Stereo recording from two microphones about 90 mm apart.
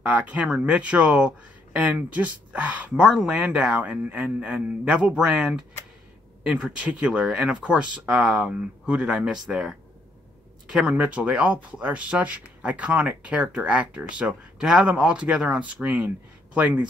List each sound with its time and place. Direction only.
0.0 s speech: 20° right (ahead or behind)